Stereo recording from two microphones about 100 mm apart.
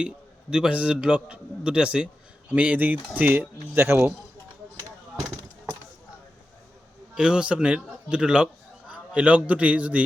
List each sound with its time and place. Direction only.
0.5 s a man's voice: 10° right (ahead or behind)
7.2 s a man's voice: 10° right (ahead or behind)